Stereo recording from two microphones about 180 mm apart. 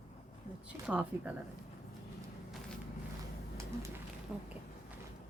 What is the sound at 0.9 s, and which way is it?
Speech, 5° right (ahead or behind).